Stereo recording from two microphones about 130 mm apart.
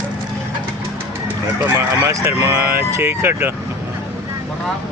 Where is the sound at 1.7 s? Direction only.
20° right (ahead or behind).